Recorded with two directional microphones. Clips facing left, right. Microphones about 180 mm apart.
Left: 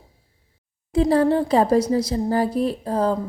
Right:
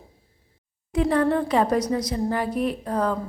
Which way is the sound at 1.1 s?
30° left (ahead or behind).